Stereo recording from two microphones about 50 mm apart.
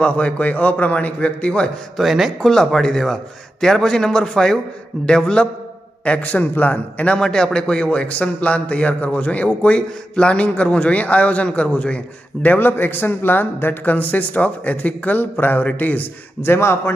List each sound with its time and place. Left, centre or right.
0.0 s a man's voice: left
2.0 s speech: centre
2.4 s a man's voice: centre; by 7.2 s left
7.2 s a man's voice: centre; by 16.1 s left
16.4 s a man's voice: left